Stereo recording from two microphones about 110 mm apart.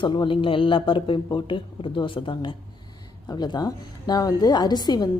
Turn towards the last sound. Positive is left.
turn(degrees=40)  # may be behind; listen again after turning